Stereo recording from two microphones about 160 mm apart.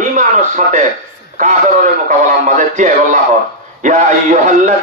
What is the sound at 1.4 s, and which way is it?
Music, 50° right (ahead or behind).